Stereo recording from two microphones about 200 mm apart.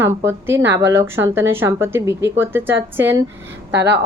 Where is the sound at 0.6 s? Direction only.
65° right (ahead or behind).